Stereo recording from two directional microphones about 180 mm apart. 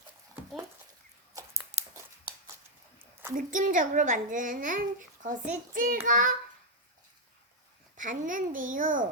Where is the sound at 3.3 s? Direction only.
45° right (ahead or behind).